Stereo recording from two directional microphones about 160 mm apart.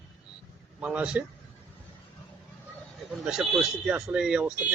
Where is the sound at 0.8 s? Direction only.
5° right (ahead or behind).